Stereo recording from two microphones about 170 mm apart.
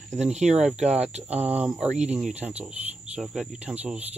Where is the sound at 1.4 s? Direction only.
10° right (ahead or behind).